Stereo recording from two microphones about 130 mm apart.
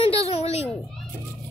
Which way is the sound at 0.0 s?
50° left (ahead or behind).